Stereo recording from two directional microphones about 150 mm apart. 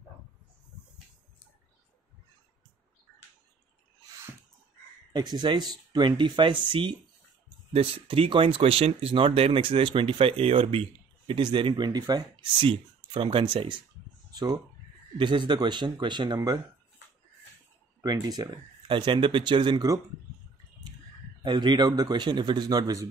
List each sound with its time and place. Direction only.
5.1 s a man's voice: 30° right (ahead or behind)
18.0 s speech: 25° right (ahead or behind)
21.4 s a man's voice: 30° right (ahead or behind)